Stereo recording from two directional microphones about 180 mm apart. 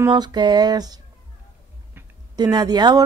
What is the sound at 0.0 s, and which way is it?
Speech, 25° right (ahead or behind).